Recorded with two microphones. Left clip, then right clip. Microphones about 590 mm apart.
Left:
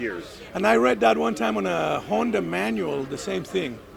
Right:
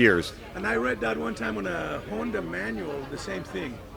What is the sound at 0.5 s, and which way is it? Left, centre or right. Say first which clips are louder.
Speech: left 8 dB; left.